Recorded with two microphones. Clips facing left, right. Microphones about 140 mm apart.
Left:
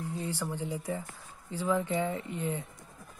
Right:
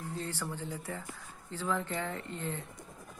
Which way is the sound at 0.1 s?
15° left (ahead or behind).